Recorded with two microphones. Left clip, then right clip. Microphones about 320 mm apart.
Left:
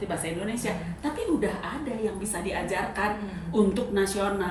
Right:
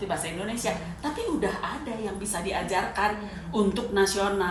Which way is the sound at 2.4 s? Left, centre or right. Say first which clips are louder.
Right 2 dB; centre.